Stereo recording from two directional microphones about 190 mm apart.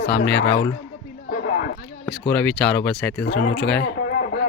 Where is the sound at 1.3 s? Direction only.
45° left (ahead or behind).